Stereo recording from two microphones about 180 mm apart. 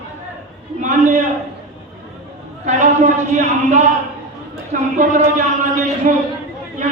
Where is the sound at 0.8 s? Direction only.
45° right (ahead or behind).